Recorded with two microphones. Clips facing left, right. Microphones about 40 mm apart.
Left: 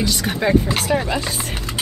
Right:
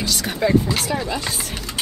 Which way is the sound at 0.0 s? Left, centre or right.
Left.